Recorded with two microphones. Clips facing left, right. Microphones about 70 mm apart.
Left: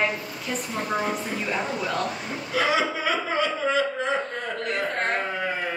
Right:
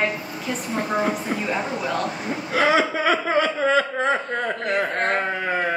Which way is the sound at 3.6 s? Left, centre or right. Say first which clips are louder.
Right 4 dB; right.